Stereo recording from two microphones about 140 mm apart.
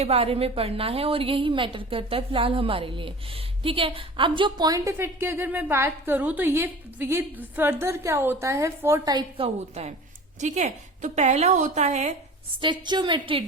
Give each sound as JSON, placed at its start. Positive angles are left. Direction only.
{"t": 0.0, "sound": "a woman's voice", "side_deg": -45}
{"t": 4.9, "sound": "a woman's voice", "side_deg": -15}
{"t": 9.4, "sound": "a woman's voice", "side_deg": -40}
{"t": 10.4, "sound": "a woman's voice", "side_deg": -55}
{"t": 12.6, "sound": "a woman's voice", "side_deg": -35}